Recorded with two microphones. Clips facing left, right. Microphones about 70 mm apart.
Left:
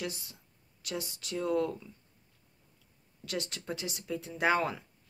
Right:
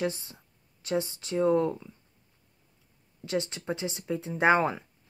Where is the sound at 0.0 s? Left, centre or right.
Right.